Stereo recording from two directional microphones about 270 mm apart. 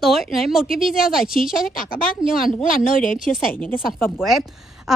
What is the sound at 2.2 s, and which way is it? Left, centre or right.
Speech, centre.